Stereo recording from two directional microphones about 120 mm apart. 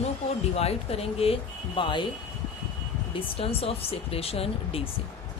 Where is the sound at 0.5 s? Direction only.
55° left (ahead or behind).